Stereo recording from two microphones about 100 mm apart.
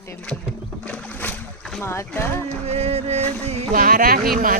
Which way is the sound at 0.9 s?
15° left (ahead or behind).